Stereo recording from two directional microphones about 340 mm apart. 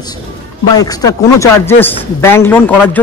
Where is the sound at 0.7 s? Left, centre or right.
Centre.